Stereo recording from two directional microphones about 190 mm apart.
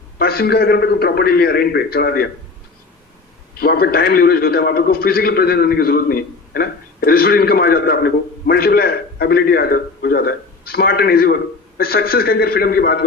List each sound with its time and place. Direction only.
0.2 s a man's voice: 55° left (ahead or behind)
3.6 s a man's voice: 55° left (ahead or behind)